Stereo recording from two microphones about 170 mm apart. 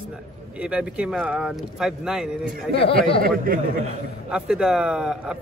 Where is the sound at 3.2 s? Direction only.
60° right (ahead or behind).